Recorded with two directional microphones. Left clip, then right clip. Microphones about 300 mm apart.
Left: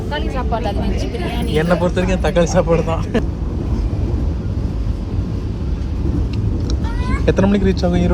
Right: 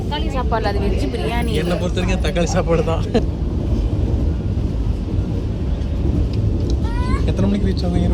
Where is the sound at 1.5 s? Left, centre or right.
Centre.